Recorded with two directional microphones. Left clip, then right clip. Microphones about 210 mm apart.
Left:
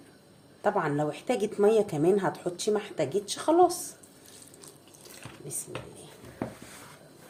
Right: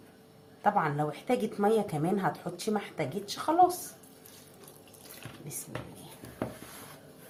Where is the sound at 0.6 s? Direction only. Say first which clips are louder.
Even; 30° left (ahead or behind).